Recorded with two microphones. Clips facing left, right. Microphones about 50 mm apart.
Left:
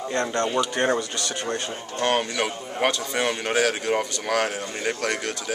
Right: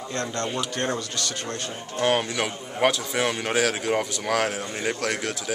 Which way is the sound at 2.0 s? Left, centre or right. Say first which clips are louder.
Even; centre.